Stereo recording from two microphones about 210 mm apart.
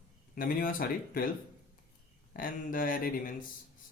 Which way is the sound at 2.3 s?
40° left (ahead or behind).